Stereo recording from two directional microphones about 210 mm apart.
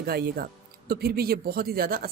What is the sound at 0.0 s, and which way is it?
Speech, 45° right (ahead or behind).